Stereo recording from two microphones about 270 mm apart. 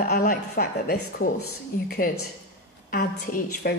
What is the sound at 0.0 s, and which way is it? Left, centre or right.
A woman's voice, left.